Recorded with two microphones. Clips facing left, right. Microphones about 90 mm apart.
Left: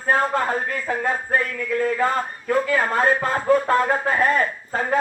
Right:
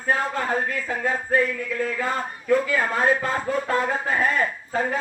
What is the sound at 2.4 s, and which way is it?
Speech, 45° left (ahead or behind).